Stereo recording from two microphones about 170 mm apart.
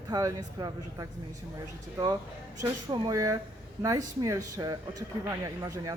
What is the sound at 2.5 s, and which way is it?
Speech, 20° right (ahead or behind).